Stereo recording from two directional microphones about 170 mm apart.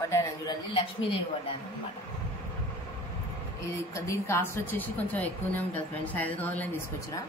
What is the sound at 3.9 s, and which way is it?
A woman's voice, 15° left (ahead or behind).